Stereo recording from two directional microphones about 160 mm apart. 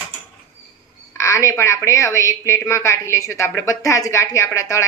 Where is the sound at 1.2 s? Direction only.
20° left (ahead or behind).